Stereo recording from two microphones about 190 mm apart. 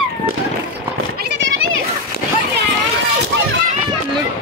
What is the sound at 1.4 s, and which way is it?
Children playing, 90° right.